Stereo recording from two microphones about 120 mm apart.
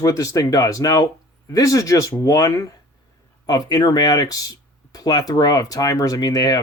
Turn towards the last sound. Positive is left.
turn(degrees=35)  # may be behind; listen again after turning